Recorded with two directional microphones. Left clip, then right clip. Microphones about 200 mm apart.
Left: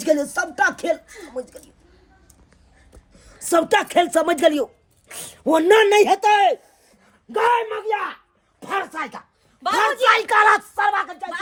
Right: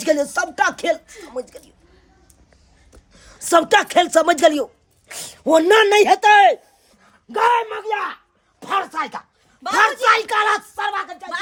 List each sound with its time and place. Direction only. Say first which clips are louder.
0.0 s speech: right 1 dB; 20° right (ahead or behind)
3.1 s a sound: right 8 dB; 15° right (ahead or behind)
3.4 s speech: right 3 dB; 15° right (ahead or behind)
8.5 s speech: right 4 dB; 15° right (ahead or behind)
10.0 s speech: left 1 dB; centre (ahead or behind)